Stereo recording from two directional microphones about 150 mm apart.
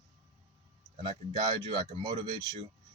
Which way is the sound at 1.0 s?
30° right (ahead or behind).